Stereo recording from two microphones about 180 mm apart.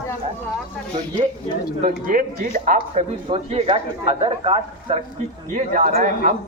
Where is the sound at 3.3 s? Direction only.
35° right (ahead or behind).